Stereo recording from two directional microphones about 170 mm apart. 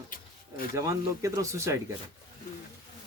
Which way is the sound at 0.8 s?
20° right (ahead or behind).